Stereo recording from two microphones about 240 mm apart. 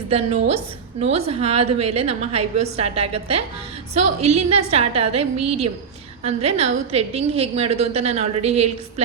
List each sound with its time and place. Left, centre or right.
0.1 s a woman's voice: right